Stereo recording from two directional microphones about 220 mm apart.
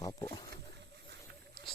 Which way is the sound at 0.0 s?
15° left (ahead or behind).